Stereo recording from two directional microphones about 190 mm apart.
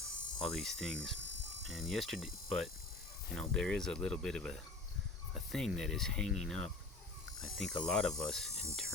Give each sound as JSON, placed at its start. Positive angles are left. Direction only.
{"t": 0.4, "sound": "speech", "side_deg": 0}